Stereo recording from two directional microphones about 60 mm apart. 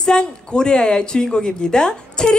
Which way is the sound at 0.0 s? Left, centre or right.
Centre.